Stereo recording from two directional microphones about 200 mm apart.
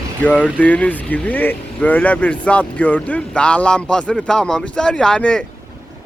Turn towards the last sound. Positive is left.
turn(degrees=5)  # may be behind; listen again after turning